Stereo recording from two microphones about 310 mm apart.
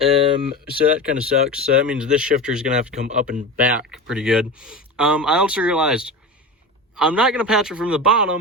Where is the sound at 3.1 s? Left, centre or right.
Right.